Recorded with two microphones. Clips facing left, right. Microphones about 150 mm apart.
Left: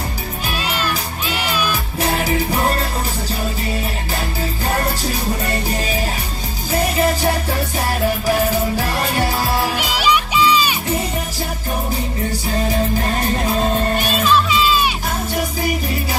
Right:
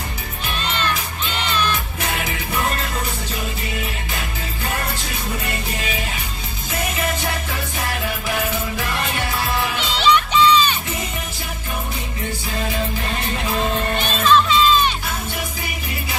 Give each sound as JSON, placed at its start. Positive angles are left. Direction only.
{"t": 0.6, "sound": "music", "side_deg": 10}
{"t": 2.0, "sound": "music", "side_deg": 35}
{"t": 5.4, "sound": "music", "side_deg": 35}
{"t": 9.8, "sound": "music", "side_deg": 10}
{"t": 12.3, "sound": "music", "side_deg": 40}
{"t": 14.2, "sound": "music", "side_deg": 10}
{"t": 15.3, "sound": "music", "side_deg": 40}